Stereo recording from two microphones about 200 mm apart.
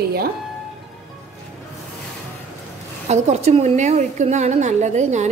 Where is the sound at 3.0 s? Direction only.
35° right (ahead or behind).